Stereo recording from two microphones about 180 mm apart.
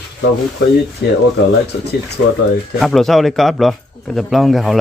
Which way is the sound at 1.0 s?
75° left (ahead or behind).